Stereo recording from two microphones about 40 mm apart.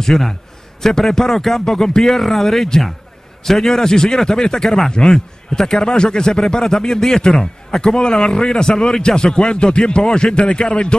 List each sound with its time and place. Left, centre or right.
0.0 s a man's voice: centre